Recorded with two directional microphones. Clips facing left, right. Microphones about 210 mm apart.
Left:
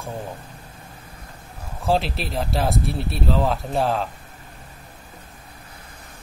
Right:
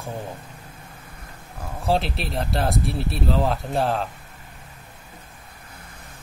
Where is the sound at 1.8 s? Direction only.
Centre (ahead or behind).